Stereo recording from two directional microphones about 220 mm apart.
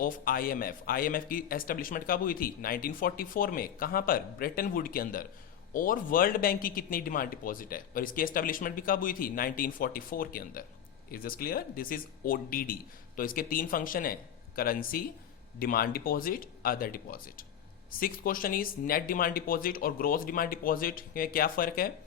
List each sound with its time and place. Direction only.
0.0 s a man's voice: 40° left (ahead or behind)